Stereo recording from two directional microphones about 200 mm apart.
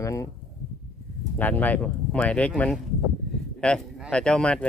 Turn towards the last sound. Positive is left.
turn(degrees=5)  # may be behind; listen again after turning